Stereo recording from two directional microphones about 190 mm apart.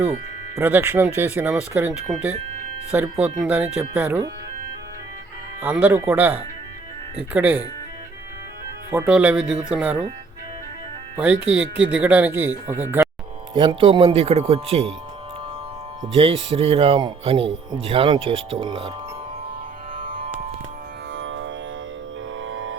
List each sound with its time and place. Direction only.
0.5 s speech: 10° right (ahead or behind)
5.6 s speech: 10° right (ahead or behind)
8.9 s speech: 10° right (ahead or behind)
11.2 s speech: 5° right (ahead or behind)
13.5 s speech: 25° right (ahead or behind)
16.1 s speech: 30° right (ahead or behind)
20.1 s music: 30° right (ahead or behind)
21.1 s music: 85° right